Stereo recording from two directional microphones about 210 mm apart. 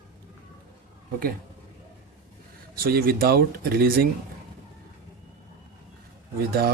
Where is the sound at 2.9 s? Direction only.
45° right (ahead or behind).